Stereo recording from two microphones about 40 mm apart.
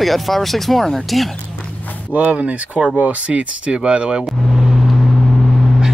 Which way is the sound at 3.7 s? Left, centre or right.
Right.